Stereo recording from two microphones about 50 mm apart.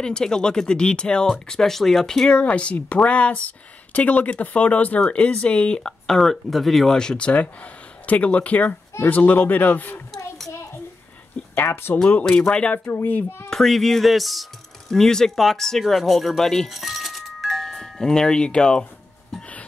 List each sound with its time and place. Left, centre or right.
0.0 s speech: centre
1.5 s speech: centre
2.2 s speech: left
6.0 s speech: centre
7.0 s a man's voice: centre; by 10.0 s left
11.5 s speech: left
12.3 s speech: centre
13.0 s speech: left
13.5 s speech: centre